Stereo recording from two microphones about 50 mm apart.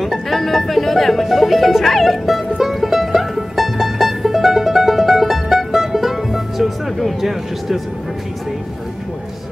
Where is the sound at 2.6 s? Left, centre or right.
Centre.